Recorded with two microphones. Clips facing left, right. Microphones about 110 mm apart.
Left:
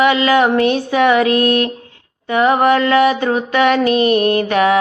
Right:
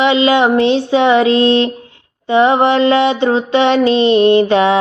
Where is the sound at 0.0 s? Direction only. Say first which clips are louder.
Right 1 dB; 25° right (ahead or behind).